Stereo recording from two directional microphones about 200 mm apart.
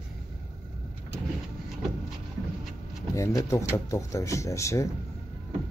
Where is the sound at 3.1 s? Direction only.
15° left (ahead or behind).